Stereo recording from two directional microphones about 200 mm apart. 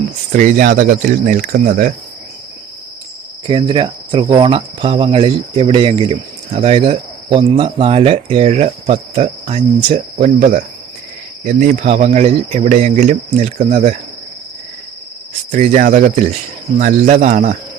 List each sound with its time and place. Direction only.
0.3 s speech: 40° right (ahead or behind)
3.4 s cricket: 25° right (ahead or behind)
11.4 s speech: 40° right (ahead or behind)
15.5 s speech: 35° right (ahead or behind)